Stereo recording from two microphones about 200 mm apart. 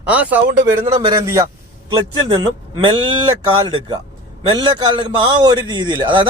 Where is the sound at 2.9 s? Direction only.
25° right (ahead or behind).